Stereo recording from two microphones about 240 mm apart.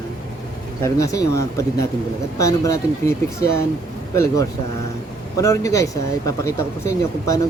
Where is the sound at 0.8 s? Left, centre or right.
Centre.